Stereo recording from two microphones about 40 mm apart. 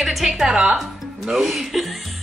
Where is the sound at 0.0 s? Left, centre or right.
Centre.